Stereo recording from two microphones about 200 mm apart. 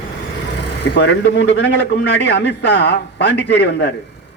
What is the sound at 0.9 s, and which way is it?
A man's voice, 60° left (ahead or behind).